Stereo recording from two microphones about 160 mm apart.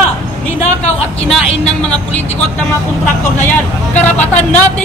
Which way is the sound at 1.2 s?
5° left (ahead or behind).